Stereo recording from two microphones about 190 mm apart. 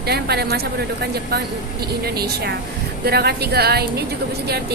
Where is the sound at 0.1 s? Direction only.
60° right (ahead or behind).